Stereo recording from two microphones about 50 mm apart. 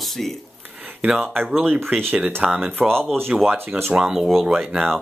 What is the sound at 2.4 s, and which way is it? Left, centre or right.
Speech, centre.